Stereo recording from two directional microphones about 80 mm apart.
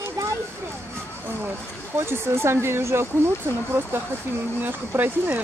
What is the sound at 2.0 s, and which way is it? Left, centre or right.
Speech, right.